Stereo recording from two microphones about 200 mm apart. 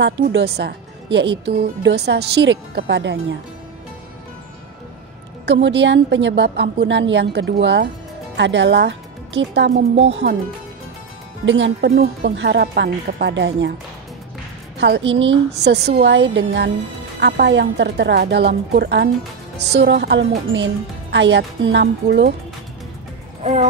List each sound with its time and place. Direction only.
0.0 s a woman's voice: 60° right (ahead or behind)
5.4 s a woman's voice: 60° right (ahead or behind)
9.7 s speech: 35° right (ahead or behind)
11.4 s speech: 70° right (ahead or behind)
12.0 s a woman's voice: 50° right (ahead or behind)
14.8 s a woman's voice: 65° right (ahead or behind)
15.6 s a woman's voice: 55° right (ahead or behind)
23.4 s speech: 30° right (ahead or behind)